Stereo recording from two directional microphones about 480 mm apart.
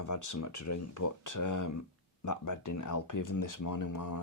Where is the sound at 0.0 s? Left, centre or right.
Left.